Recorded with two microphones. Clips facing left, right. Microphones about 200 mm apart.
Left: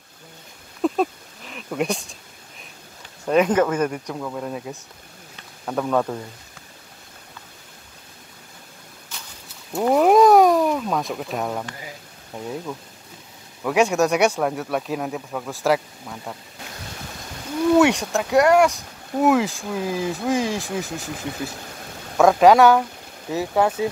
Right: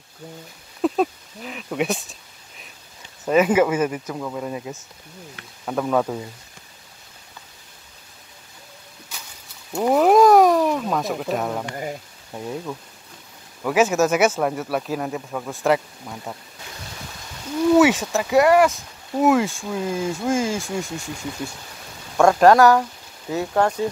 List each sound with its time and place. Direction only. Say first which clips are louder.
0.8 s a sound: right 1 dB; centre (ahead or behind)
3.3 s speech: right 1 dB; 5° right (ahead or behind)
9.7 s speech: even; centre (ahead or behind)
11.7 s speech: right 9 dB; 50° right (ahead or behind)
12.4 s speech: right 1 dB; centre (ahead or behind)
17.7 s speech: right 1 dB; 5° right (ahead or behind)
22.1 s speech: even; centre (ahead or behind)